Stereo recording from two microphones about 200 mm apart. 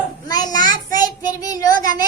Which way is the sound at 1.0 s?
20° left (ahead or behind).